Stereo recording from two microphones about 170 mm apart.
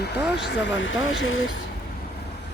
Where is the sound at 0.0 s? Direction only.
80° left.